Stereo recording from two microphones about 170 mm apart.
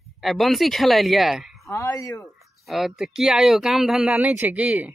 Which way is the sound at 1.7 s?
15° left (ahead or behind).